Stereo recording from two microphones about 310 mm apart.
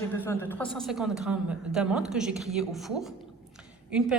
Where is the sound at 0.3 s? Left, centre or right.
Centre.